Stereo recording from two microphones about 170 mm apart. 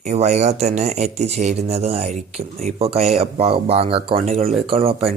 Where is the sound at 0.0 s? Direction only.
40° right (ahead or behind).